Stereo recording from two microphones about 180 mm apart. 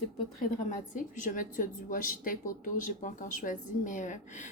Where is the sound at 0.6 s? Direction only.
45° left (ahead or behind).